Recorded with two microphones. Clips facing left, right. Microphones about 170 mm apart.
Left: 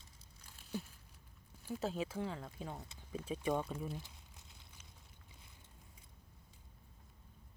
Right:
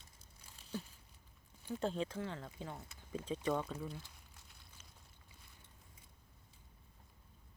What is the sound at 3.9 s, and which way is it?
Crumpling, 20° left (ahead or behind).